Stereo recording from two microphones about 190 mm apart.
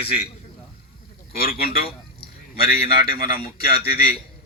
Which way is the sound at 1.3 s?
55° left (ahead or behind).